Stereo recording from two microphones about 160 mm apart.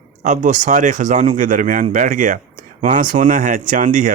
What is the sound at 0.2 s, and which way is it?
Speech, 50° right (ahead or behind).